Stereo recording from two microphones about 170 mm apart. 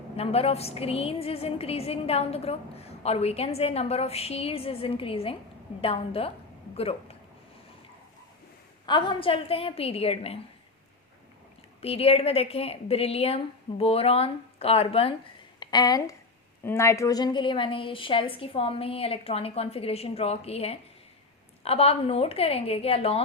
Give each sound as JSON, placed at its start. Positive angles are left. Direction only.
{"t": 0.2, "sound": "a woman's voice", "side_deg": 35}
{"t": 8.9, "sound": "a woman's voice", "side_deg": 25}
{"t": 11.8, "sound": "a woman's voice", "side_deg": 35}
{"t": 15.6, "sound": "a woman's voice", "side_deg": 25}